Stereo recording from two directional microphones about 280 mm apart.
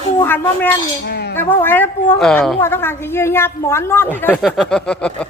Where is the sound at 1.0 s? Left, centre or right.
Left.